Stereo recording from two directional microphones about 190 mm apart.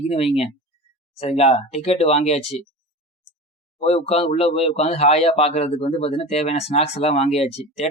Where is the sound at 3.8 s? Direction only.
35° left (ahead or behind).